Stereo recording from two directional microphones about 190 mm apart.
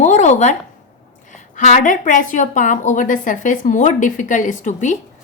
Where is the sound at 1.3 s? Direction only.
40° left (ahead or behind).